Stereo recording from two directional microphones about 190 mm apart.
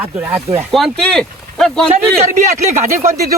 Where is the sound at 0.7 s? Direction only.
Centre (ahead or behind).